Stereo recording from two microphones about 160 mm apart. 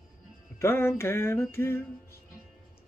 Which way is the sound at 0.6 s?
15° left (ahead or behind).